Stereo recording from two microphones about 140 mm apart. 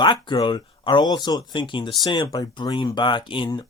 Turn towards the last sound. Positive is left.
turn(degrees=30)  # may be behind; listen again after turning